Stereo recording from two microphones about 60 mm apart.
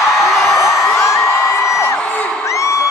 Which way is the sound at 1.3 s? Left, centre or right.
Left.